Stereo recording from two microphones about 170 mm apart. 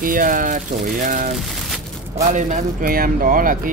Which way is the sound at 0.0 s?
55° right (ahead or behind).